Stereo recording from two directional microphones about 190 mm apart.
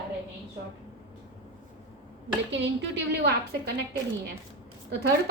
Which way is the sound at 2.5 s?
65° right (ahead or behind).